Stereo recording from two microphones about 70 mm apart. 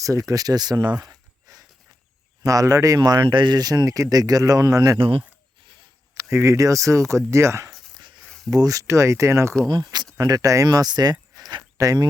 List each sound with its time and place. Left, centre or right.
0.0 s speech: right
1.5 s a sound: right
2.4 s speech: right
3.0 s speech: right
6.3 s speech: right
8.4 s speech: right
9.6 s speech: right
10.2 s speech: right